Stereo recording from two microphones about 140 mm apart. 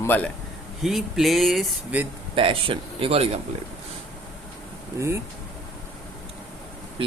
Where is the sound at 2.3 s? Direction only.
40° right (ahead or behind).